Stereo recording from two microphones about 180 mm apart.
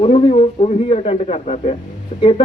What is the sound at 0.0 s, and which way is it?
A man's voice, 35° left (ahead or behind).